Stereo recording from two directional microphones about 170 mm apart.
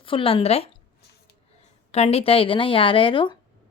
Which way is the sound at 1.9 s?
35° left (ahead or behind).